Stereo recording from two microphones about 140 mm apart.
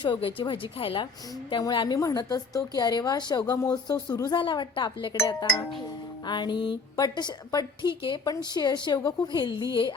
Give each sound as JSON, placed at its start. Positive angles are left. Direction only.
{"t": 0.0, "sound": "a woman's voice", "side_deg": 35}
{"t": 6.2, "sound": "a woman's voice", "side_deg": 30}